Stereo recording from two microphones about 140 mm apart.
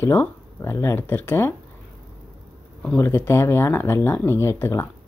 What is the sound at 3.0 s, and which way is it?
Speech, 20° left (ahead or behind).